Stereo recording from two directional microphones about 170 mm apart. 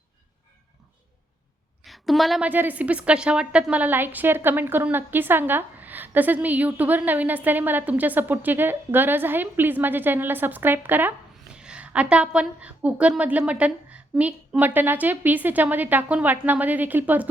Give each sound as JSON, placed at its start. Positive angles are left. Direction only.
{"t": 1.8, "sound": "a woman's voice", "side_deg": 0}